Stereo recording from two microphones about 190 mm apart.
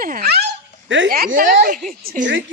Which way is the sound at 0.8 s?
70° right (ahead or behind).